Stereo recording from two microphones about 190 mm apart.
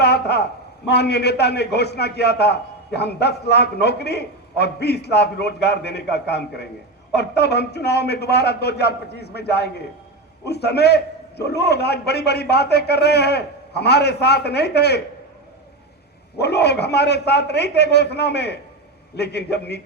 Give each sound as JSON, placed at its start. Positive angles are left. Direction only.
{"t": 0.0, "sound": "a sound", "side_deg": 60}
{"t": 0.9, "sound": "a man's voice", "side_deg": 60}
{"t": 16.4, "sound": "a man's voice", "side_deg": 60}